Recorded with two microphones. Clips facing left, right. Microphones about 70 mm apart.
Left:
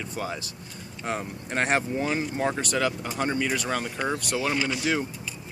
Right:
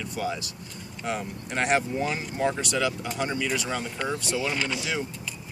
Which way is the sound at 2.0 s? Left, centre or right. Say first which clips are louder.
Left 1 dB; left.